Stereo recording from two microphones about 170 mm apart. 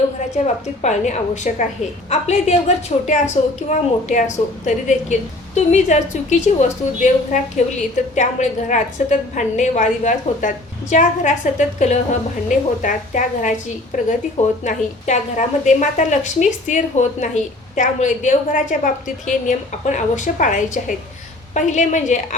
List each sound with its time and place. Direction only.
0.3 s a woman's voice: 45° left (ahead or behind)